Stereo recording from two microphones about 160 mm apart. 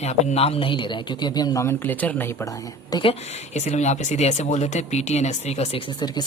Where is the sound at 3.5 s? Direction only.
45° left (ahead or behind).